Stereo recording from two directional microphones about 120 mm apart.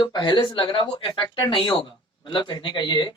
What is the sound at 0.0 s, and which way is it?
A man's voice, 40° left (ahead or behind).